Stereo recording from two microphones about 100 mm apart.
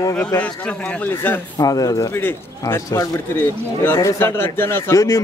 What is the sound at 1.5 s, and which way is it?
Speech, 40° left (ahead or behind).